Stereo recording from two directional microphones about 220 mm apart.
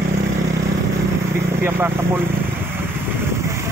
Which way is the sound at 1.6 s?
10° right (ahead or behind).